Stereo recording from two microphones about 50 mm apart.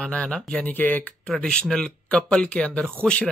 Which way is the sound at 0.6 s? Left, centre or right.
Left.